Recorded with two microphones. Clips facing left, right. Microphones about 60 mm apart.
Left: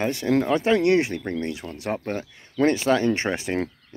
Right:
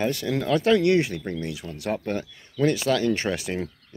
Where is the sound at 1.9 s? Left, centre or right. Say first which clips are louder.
Right 1 dB; left.